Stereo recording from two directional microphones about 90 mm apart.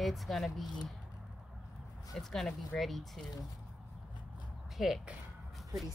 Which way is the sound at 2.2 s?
5° left (ahead or behind).